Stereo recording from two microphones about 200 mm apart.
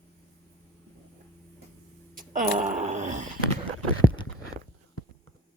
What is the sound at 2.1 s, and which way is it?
Wail, 40° right (ahead or behind).